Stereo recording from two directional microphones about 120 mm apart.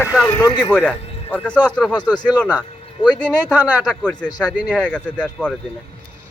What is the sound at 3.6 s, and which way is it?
Speech, 15° right (ahead or behind).